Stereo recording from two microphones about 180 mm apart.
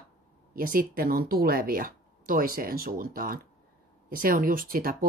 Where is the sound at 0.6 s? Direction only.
55° right (ahead or behind).